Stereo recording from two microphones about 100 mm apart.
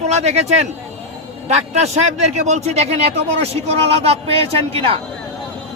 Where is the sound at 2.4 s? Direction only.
90° right.